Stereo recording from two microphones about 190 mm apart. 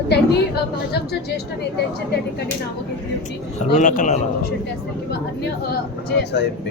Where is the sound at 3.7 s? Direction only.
45° left (ahead or behind).